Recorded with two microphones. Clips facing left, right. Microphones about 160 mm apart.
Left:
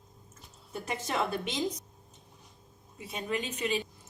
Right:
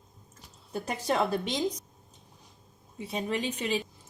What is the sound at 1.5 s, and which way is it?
Speech, centre (ahead or behind).